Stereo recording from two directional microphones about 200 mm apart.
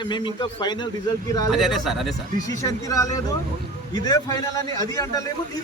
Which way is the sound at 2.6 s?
15° left (ahead or behind).